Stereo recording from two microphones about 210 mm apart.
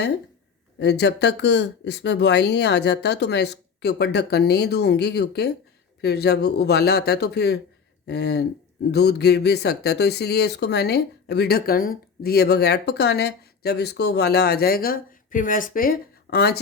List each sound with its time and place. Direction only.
0.8 s speech: 55° left (ahead or behind)